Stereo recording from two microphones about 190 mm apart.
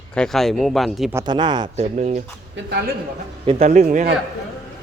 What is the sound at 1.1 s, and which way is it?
Speech, 25° right (ahead or behind).